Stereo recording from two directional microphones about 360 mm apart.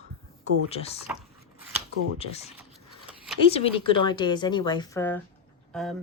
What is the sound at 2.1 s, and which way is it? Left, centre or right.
Speech, centre.